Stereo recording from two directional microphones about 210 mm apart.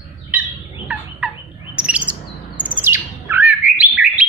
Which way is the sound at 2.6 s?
10° right (ahead or behind).